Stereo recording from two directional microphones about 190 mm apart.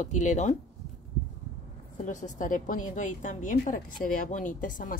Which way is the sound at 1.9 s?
40° left (ahead or behind).